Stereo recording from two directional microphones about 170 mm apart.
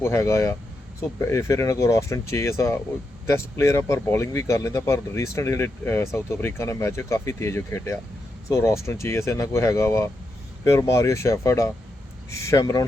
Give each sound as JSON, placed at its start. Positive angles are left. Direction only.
{"t": 0.0, "sound": "speech", "side_deg": 15}